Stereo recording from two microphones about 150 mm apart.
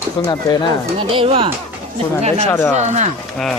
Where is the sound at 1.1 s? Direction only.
35° right (ahead or behind).